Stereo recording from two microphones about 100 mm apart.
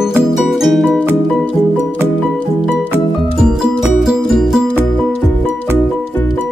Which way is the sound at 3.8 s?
Centre (ahead or behind).